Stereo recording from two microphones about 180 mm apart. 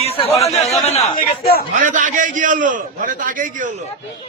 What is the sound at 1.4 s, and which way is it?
Speech, 55° left (ahead or behind).